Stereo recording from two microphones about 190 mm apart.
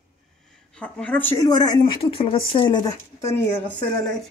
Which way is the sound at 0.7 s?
5° left (ahead or behind).